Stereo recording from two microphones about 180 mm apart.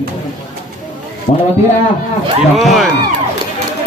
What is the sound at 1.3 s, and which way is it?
Speech, 45° left (ahead or behind).